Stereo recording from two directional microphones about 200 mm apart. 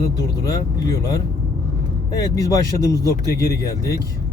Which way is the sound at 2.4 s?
15° left (ahead or behind).